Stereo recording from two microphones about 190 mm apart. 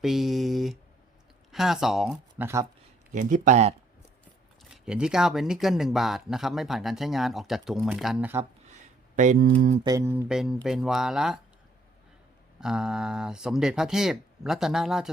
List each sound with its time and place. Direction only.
0.0 s speech: centre (ahead or behind)
3.1 s speech: 40° right (ahead or behind)
4.7 s speech: 5° right (ahead or behind)
8.7 s a sound: 40° right (ahead or behind)
9.8 s mantra: 15° right (ahead or behind)
10.2 s speech: centre (ahead or behind)
12.5 s speech: 5° right (ahead or behind)